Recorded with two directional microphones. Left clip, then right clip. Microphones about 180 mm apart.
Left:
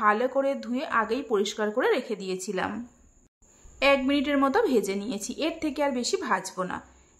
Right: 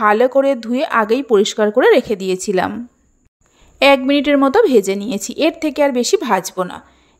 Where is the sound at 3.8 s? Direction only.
40° right (ahead or behind).